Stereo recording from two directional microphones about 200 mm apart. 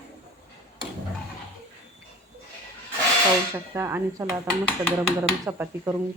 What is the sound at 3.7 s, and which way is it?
Speech, 10° right (ahead or behind).